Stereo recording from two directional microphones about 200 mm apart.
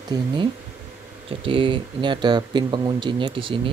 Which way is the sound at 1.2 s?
25° right (ahead or behind).